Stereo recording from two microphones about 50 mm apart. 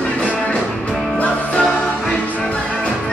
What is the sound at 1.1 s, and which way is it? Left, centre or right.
Music, left.